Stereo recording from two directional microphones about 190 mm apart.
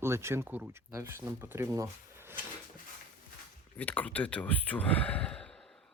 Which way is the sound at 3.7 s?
10° left (ahead or behind).